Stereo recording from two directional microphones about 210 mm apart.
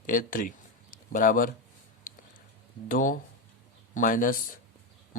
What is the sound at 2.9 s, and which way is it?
Speech, 40° left (ahead or behind).